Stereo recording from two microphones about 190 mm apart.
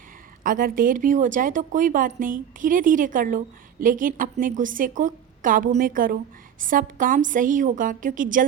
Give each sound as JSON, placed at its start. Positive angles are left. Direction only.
{"t": 0.4, "sound": "a woman's voice", "side_deg": -45}